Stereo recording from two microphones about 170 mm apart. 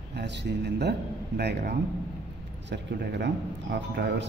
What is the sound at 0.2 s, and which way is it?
Speech, 85° right.